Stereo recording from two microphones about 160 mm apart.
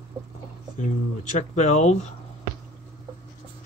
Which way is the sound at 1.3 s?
45° left (ahead or behind).